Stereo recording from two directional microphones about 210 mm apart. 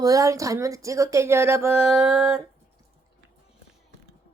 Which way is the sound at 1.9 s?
Centre (ahead or behind).